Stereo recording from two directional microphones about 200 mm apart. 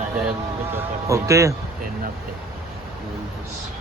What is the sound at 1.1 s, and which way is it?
Speech, 15° right (ahead or behind).